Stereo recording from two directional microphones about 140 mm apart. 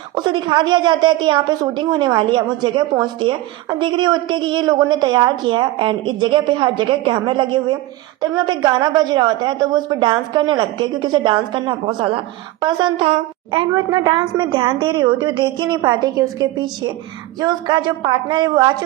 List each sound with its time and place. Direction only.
0.1 s speech: 35° right (ahead or behind)